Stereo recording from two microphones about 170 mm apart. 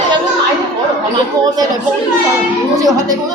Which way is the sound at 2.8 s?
20° right (ahead or behind).